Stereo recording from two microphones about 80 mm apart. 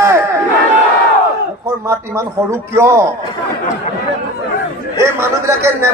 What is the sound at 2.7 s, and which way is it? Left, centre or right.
Speech, right.